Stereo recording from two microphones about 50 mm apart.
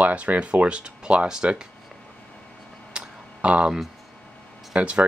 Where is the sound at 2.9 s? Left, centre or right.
Right.